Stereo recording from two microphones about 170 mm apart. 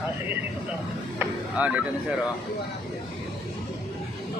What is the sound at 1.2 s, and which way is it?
Speech, 10° right (ahead or behind).